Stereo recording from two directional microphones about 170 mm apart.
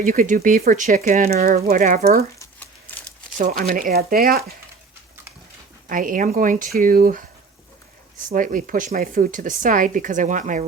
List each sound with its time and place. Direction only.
0.0 s speech: 55° right (ahead or behind)
3.3 s speech: 45° right (ahead or behind); by 4.5 s 65° right (ahead or behind)
5.9 s speech: 50° right (ahead or behind)
8.3 s speech: 50° right (ahead or behind)